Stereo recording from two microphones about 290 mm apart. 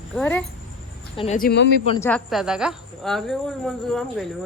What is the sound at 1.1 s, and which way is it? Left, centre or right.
Speech, centre.